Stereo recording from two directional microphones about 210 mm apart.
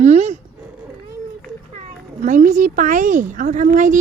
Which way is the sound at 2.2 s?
35° right (ahead or behind).